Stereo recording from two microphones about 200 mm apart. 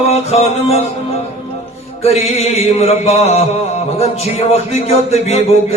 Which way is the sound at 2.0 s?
30° left (ahead or behind).